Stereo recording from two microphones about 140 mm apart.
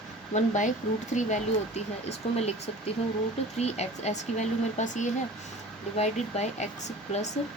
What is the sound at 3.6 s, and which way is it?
Speech, 50° left (ahead or behind).